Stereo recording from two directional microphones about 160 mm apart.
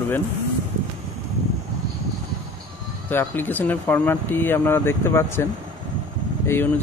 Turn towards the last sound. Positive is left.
turn(degrees=15)  # may be behind; listen again after turning